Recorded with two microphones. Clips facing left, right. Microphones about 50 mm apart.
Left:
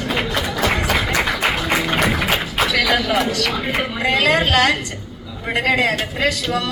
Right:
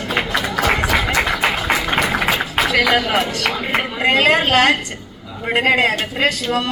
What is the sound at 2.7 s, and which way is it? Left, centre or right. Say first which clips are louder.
A man's voice: right 2 dB; right.